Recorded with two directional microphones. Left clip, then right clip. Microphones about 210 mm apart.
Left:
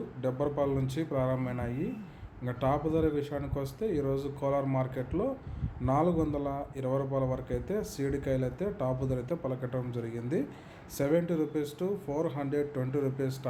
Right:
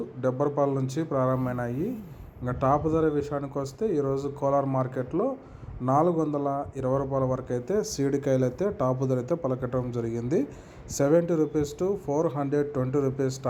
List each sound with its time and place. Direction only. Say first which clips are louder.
0.2 s a man's voice: right 5 dB; 20° right (ahead or behind)